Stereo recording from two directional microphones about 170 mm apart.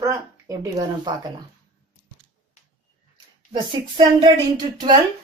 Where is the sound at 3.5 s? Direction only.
25° right (ahead or behind).